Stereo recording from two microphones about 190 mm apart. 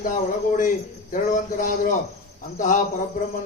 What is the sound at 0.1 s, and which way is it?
Speech, 45° left (ahead or behind).